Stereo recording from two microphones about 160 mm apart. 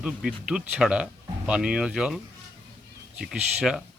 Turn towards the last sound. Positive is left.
turn(degrees=-5)  # may be behind; listen again after turning